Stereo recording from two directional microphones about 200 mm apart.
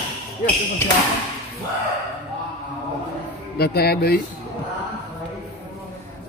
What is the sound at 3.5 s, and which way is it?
Speech, 50° left (ahead or behind).